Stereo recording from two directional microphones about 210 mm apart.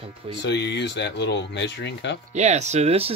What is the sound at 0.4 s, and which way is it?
Speech, 55° left (ahead or behind).